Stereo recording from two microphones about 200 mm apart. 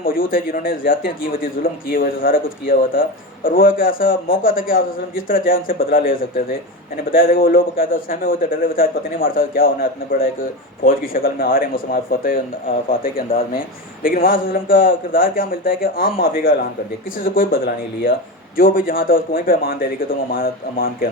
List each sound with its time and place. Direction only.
0.0 s a man's voice: 45° left (ahead or behind)